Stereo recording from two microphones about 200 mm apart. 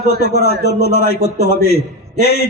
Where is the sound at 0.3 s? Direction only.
55° left (ahead or behind).